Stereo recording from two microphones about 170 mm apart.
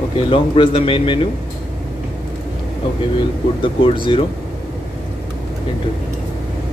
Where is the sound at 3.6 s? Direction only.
30° left (ahead or behind).